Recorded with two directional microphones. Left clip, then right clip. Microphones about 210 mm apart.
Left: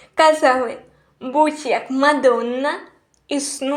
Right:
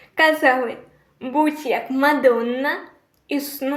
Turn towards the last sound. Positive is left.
turn(degrees=20)  # may be behind; listen again after turning